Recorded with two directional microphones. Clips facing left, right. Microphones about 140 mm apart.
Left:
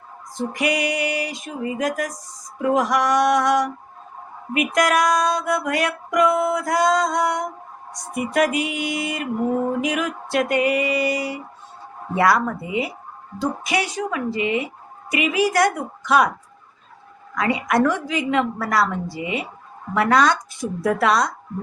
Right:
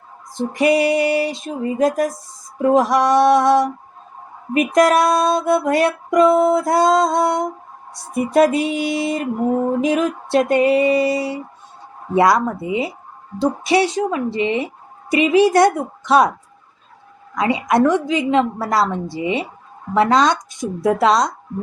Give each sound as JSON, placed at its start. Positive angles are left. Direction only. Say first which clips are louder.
{"t": 0.3, "sound": "music", "louder": "right 7 dB", "side_deg": -30}
{"t": 17.3, "sound": "music", "louder": "right 3 dB", "side_deg": -20}